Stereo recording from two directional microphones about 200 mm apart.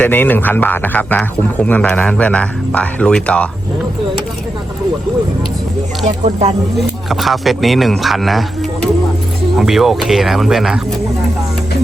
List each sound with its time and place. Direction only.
0.0 s a man's voice: 10° left (ahead or behind)
6.1 s speech: 35° right (ahead or behind)
7.1 s speech: centre (ahead or behind)
9.6 s speech: centre (ahead or behind)